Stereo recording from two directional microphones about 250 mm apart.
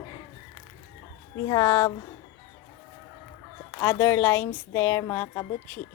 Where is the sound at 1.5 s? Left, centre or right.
Centre.